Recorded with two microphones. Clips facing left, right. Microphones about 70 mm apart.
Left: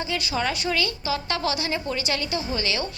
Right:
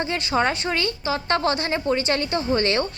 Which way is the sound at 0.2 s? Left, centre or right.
Right.